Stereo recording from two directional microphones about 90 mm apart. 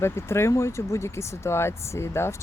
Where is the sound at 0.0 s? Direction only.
30° left (ahead or behind).